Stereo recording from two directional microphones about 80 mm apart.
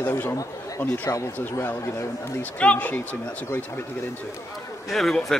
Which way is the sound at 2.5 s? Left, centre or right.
Centre.